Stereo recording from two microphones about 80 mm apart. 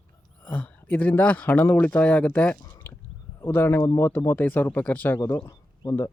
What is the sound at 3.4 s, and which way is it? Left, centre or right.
Speech, left.